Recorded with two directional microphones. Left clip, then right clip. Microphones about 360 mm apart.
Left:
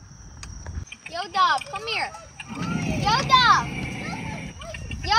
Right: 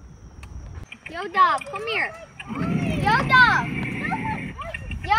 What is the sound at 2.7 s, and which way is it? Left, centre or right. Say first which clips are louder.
Vehicle: right 2 dB; centre.